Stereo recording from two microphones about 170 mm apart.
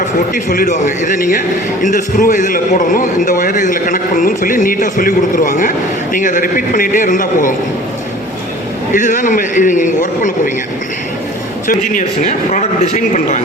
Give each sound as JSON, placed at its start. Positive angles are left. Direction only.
{"t": 0.3, "sound": "a man's voice", "side_deg": 55}
{"t": 8.9, "sound": "a man's voice", "side_deg": 50}
{"t": 11.7, "sound": "a man's voice", "side_deg": 45}